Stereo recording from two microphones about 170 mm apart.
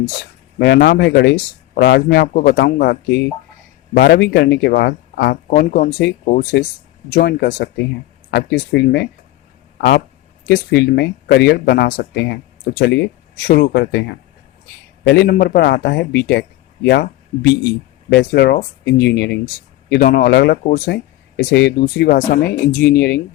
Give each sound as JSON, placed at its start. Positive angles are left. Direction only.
{"t": 0.6, "sound": "speech", "side_deg": 75}
{"t": 10.4, "sound": "speech", "side_deg": 70}
{"t": 13.5, "sound": "speech", "side_deg": 70}
{"t": 18.2, "sound": "speech", "side_deg": 70}
{"t": 19.9, "sound": "speech", "side_deg": 60}
{"t": 20.7, "sound": "speech", "side_deg": 50}
{"t": 20.9, "sound": "speech", "side_deg": 80}